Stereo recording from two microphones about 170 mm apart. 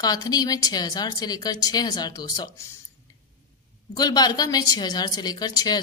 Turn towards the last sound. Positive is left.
turn(degrees=20)  # may be behind; listen again after turning